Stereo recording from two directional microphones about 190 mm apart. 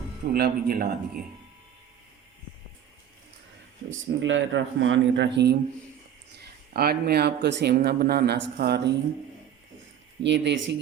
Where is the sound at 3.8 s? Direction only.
80° right; by 8.8 s 60° right (ahead or behind).